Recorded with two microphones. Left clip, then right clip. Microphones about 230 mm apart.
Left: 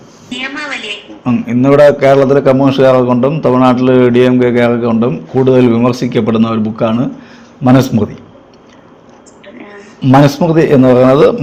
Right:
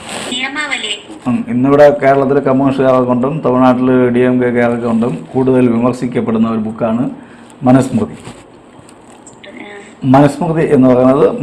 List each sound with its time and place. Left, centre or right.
0.3 s a woman's voice: centre
1.2 s a man's voice: left
10.1 s a man's voice: left